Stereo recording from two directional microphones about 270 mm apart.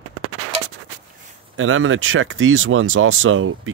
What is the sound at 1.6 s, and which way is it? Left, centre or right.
Speech, right.